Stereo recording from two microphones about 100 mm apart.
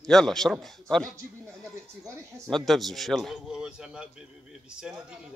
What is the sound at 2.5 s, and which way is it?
Speech, centre (ahead or behind).